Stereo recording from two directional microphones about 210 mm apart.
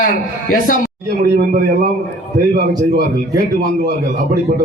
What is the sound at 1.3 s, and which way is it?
Speech, 40° right (ahead or behind).